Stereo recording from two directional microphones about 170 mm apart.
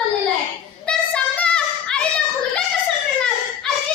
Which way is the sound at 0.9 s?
5° left (ahead or behind).